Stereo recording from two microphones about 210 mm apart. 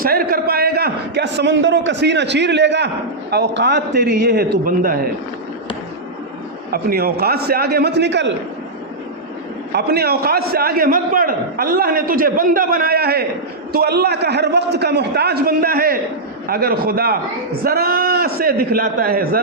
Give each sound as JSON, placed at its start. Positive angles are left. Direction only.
{"t": 0.0, "sound": "a man's voice", "side_deg": -45}
{"t": 6.7, "sound": "a man's voice", "side_deg": -45}
{"t": 9.7, "sound": "a man's voice", "side_deg": -50}